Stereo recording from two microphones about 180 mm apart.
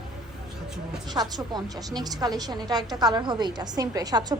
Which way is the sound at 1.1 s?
20° right (ahead or behind).